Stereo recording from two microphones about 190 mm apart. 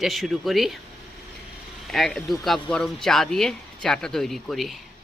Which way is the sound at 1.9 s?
Centre (ahead or behind).